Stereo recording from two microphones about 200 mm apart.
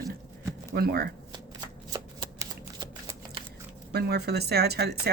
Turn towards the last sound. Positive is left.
turn(degrees=-55)  # may be behind; listen again after turning